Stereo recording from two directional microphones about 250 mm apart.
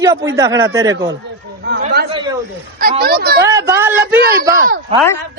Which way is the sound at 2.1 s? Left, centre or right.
Centre.